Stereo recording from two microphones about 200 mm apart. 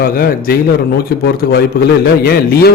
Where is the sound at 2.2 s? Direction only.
50° left (ahead or behind).